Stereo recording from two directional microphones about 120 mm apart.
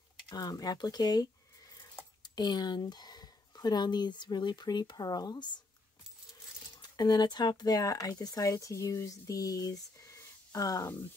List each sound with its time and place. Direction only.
0.3 s speech: 30° left (ahead or behind)
6.6 s speech: 35° left (ahead or behind)